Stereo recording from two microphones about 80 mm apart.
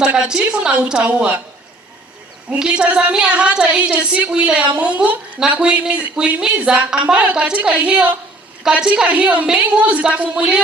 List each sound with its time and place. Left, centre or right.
0.0 s a woman's voice: centre
2.5 s a woman's voice: centre